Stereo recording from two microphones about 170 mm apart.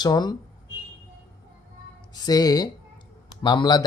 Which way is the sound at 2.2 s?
25° left (ahead or behind).